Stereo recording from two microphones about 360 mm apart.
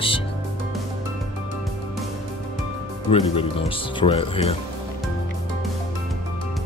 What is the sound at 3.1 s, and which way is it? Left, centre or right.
Speech, centre.